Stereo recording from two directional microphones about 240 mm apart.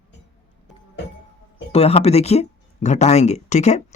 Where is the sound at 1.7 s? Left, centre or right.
Left.